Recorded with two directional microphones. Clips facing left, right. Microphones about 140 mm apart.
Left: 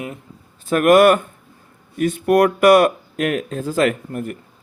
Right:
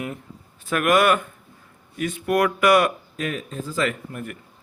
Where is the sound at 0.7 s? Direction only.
45° left (ahead or behind).